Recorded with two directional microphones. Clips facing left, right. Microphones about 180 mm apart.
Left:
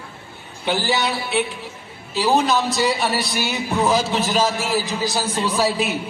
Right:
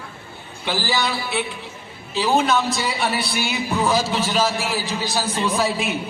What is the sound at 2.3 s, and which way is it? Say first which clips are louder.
A man's voice: even; 40° left (ahead or behind).